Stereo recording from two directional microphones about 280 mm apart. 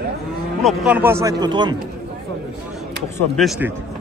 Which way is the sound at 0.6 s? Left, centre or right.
Centre.